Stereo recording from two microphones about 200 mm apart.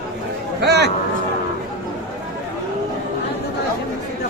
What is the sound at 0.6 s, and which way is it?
Speech, 55° right (ahead or behind).